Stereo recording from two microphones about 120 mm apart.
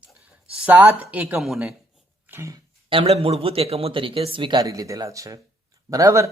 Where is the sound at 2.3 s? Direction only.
25° right (ahead or behind).